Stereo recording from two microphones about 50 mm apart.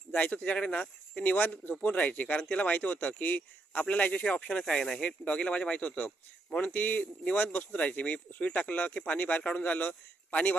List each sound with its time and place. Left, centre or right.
0.1 s speech: left
4.6 s speech: centre; by 10.6 s left